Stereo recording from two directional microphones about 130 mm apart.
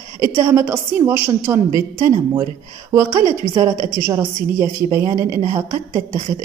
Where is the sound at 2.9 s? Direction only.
25° right (ahead or behind).